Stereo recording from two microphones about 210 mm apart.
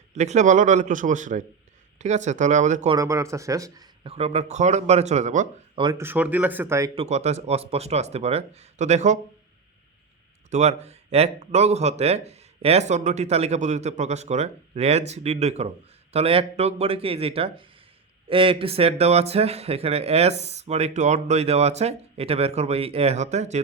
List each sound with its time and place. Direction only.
0.1 s speech: 35° right (ahead or behind)
2.9 s speech: 15° right (ahead or behind); by 5.5 s 35° right (ahead or behind)
5.7 s speech: 20° right (ahead or behind)
6.0 s speech: 10° right (ahead or behind)
6.9 s speech: 30° right (ahead or behind)
10.5 s speech: 30° right (ahead or behind)